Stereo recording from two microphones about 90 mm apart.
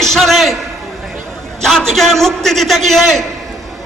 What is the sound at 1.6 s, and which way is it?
A man's voice, 5° left (ahead or behind).